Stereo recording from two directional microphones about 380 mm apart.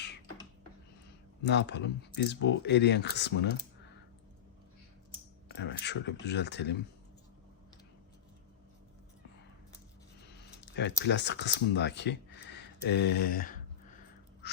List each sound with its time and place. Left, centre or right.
1.5 s speech: left
5.5 s speech: left
10.6 s speech: left
14.4 s a sound: left